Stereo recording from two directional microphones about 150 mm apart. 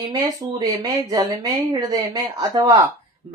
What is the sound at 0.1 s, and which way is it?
Speech, 25° right (ahead or behind).